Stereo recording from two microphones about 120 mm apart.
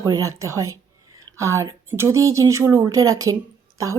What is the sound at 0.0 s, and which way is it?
Speech, 30° right (ahead or behind).